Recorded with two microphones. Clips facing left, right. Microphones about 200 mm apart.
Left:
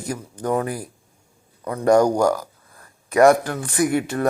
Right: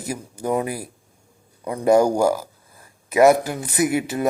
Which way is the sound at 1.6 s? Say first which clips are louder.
Even; 10° right (ahead or behind).